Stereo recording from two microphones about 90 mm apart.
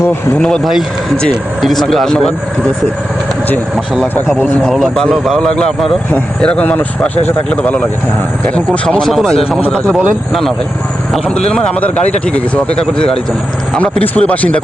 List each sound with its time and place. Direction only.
0.3 s speech: 10° left (ahead or behind)
4.6 s speech: centre (ahead or behind)
9.0 s speech: 5° left (ahead or behind)
9.6 s speech: 15° left (ahead or behind)
11.1 s speech: 10° left (ahead or behind)